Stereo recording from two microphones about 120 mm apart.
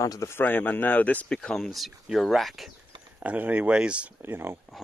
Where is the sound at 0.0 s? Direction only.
25° left (ahead or behind); by 2.7 s centre (ahead or behind).